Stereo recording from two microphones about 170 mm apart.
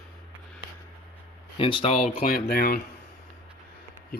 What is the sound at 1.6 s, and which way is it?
Speech, 35° left (ahead or behind).